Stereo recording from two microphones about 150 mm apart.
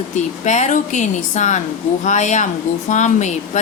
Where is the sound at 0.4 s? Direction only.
50° left (ahead or behind).